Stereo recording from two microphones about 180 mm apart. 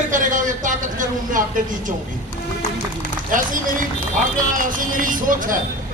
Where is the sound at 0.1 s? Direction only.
45° right (ahead or behind).